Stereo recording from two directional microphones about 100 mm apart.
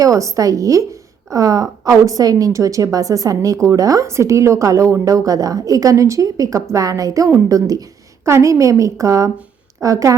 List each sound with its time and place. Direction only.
0.0 s a woman's voice: 35° right (ahead or behind)